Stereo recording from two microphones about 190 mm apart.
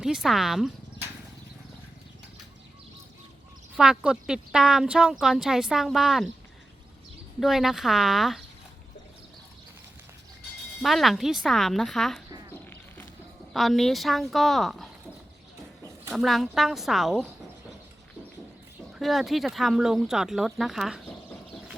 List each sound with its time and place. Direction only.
0.0 s speech: 5° right (ahead or behind)
3.8 s speech: 5° right (ahead or behind)
7.3 s speech: centre (ahead or behind)
10.8 s speech: centre (ahead or behind)
13.5 s speech: centre (ahead or behind)
16.1 s speech: centre (ahead or behind)
18.9 s speech: centre (ahead or behind)